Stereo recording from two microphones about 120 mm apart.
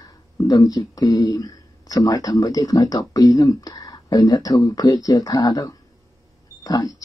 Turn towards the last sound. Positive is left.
turn(degrees=30)  # may be behind; listen again after turning